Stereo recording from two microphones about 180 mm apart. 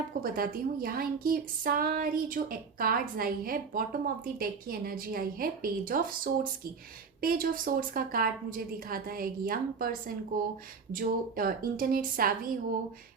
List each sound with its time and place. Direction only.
0.2 s speech: 50° right (ahead or behind)